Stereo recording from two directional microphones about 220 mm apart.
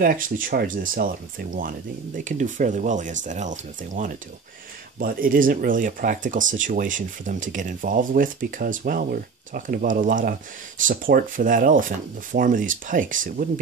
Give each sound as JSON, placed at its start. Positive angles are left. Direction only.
{"t": 0.0, "sound": "speech", "side_deg": -40}